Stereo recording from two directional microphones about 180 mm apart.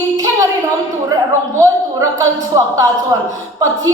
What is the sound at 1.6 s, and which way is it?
Speech, 15° right (ahead or behind).